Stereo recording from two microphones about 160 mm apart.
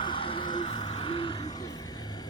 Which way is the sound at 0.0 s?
30° left (ahead or behind).